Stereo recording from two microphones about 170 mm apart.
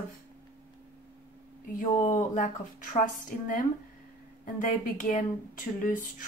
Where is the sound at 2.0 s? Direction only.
45° left (ahead or behind).